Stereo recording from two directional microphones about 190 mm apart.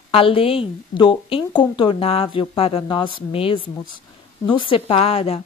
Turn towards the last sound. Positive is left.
turn(degrees=30)  # may be behind; listen again after turning